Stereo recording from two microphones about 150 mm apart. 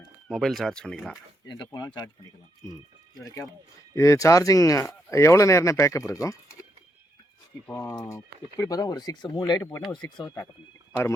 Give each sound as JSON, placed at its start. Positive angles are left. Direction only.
{"t": 0.3, "sound": "speech", "side_deg": 0}
{"t": 1.5, "sound": "speech", "side_deg": 25}
{"t": 7.7, "sound": "speech", "side_deg": 20}